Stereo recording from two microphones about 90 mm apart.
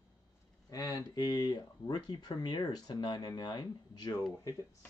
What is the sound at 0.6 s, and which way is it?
Speech, 40° left (ahead or behind).